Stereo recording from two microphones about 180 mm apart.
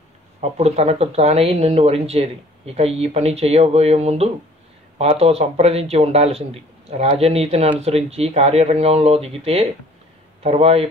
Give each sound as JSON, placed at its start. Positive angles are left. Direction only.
{"t": 0.4, "sound": "speech", "side_deg": -35}